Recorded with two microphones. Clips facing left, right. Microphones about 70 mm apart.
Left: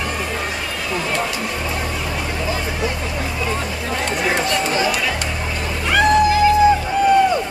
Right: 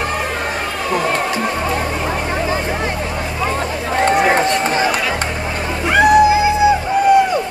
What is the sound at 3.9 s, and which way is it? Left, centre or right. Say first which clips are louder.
Run: right 8 dB; right.